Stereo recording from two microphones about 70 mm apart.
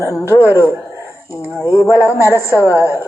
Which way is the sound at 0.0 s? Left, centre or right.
Left.